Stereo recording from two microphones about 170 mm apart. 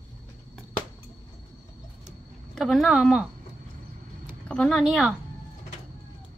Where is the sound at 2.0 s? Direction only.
Centre (ahead or behind).